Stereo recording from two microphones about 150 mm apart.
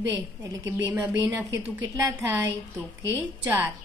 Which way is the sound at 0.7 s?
15° right (ahead or behind).